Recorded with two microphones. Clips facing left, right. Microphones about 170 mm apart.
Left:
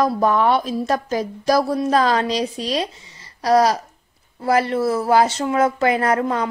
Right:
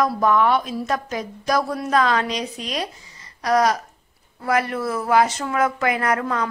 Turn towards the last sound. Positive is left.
turn(degrees=30)  # may be behind; listen again after turning